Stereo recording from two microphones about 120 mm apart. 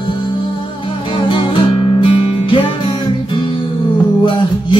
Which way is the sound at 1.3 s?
45° left (ahead or behind).